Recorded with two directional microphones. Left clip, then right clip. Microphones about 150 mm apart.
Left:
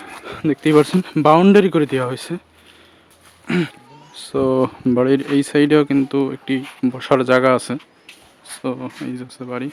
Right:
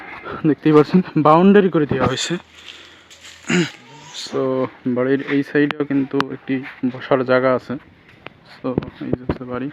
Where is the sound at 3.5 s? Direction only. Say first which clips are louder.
Right 2 dB; 10° left (ahead or behind).